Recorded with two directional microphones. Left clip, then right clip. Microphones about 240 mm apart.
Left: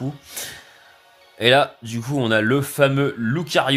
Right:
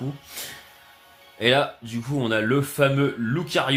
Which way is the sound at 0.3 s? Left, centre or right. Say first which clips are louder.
Left 3 dB; left.